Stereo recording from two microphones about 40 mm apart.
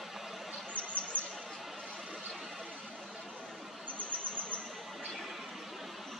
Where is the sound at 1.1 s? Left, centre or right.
Right.